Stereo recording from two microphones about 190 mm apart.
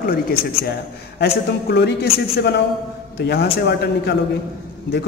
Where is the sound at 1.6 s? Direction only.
60° left (ahead or behind).